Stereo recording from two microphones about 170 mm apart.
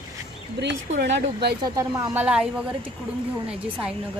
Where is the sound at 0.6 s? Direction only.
90° right.